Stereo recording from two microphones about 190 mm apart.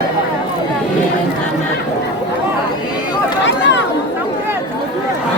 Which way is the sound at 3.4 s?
70° left (ahead or behind).